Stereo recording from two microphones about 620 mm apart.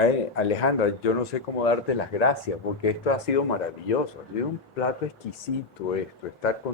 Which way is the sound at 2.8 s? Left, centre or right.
Left.